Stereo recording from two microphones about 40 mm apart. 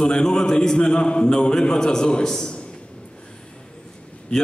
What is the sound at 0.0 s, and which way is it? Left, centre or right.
A man's voice, left.